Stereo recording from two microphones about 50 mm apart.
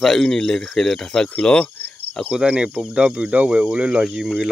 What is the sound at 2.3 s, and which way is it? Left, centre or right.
Speech, centre.